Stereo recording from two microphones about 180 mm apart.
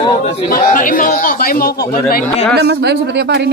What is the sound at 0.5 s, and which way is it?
A man's voice, 50° left (ahead or behind).